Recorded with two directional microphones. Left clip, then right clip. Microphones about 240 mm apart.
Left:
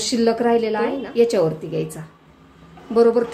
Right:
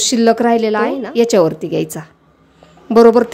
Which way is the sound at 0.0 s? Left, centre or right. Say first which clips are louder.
Right 6 dB; right.